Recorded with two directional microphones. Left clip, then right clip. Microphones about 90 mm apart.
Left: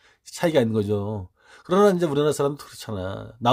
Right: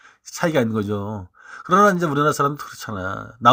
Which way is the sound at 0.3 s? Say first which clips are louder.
Right 1 dB; 20° left (ahead or behind).